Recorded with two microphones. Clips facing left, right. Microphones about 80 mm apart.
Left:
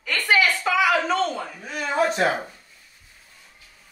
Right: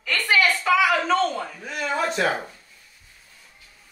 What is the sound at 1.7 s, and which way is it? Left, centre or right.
Speech, left.